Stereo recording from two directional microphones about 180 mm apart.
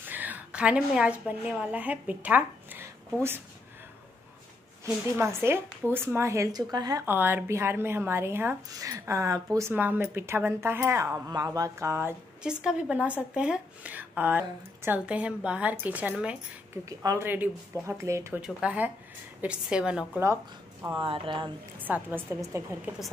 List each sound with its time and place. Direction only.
0.0 s a woman's voice: 10° right (ahead or behind)
4.8 s a woman's voice: 10° right (ahead or behind)
20.8 s speech: 25° right (ahead or behind)
21.8 s a woman's voice: 10° right (ahead or behind)